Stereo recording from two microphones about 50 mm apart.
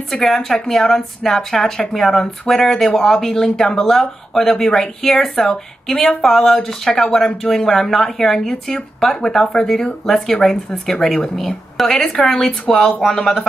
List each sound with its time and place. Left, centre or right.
0.1 s speech: centre